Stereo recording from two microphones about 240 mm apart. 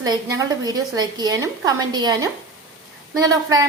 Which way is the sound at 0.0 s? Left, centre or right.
Centre.